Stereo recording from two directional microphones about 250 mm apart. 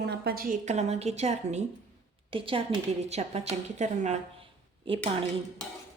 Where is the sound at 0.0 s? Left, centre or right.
Right.